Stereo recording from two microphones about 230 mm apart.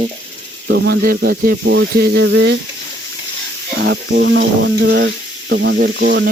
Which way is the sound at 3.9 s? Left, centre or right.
Right.